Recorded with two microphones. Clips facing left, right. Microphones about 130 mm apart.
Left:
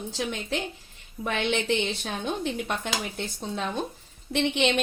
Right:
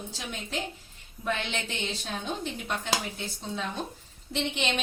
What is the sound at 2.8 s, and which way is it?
Speech, 60° left (ahead or behind).